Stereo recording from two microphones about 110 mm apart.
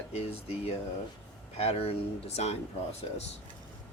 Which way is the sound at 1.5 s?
65° left (ahead or behind).